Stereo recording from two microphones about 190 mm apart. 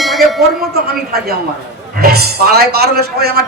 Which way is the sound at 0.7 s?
55° right (ahead or behind).